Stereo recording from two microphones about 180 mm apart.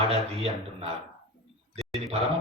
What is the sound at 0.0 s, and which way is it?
Speech, 35° right (ahead or behind).